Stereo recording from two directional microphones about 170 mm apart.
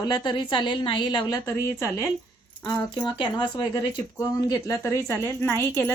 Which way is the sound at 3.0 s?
25° left (ahead or behind).